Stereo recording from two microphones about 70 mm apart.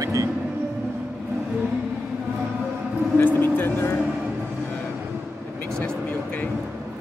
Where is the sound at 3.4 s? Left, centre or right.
Left.